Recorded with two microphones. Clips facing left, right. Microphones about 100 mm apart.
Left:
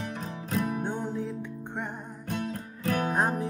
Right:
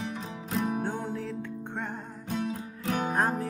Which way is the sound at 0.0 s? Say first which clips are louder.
Even; 45° left (ahead or behind).